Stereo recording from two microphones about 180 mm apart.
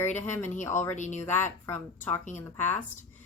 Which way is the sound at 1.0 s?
40° left (ahead or behind).